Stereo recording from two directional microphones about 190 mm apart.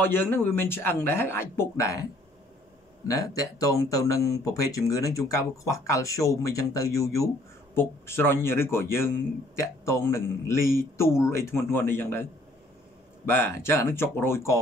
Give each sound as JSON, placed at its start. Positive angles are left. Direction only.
{"t": 0.0, "sound": "speech", "side_deg": 10}
{"t": 3.1, "sound": "speech", "side_deg": 20}
{"t": 13.3, "sound": "speech", "side_deg": 10}